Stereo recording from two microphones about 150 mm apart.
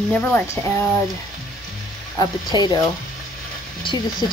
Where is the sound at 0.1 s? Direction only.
5° left (ahead or behind).